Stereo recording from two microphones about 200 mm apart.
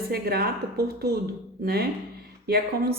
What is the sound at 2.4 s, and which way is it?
Speech, 50° right (ahead or behind).